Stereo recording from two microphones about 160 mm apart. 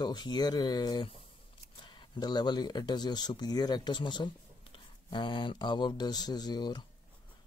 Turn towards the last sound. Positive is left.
turn(degrees=25)  # may be behind; listen again after turning